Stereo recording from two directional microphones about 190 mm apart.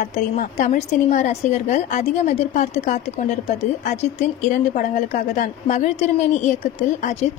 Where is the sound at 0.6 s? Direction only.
40° left (ahead or behind).